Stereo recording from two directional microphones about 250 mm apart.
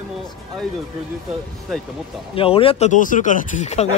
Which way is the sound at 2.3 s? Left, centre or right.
Left.